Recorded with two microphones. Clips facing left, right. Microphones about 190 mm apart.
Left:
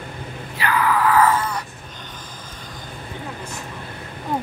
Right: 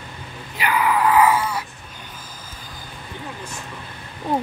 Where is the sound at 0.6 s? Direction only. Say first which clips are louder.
Even; 15° right (ahead or behind).